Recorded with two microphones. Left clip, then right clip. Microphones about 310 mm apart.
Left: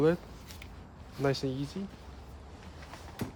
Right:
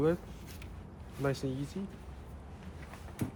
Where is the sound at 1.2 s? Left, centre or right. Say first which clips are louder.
Left 4 dB; left.